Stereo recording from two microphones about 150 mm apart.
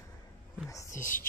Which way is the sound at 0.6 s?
20° left (ahead or behind).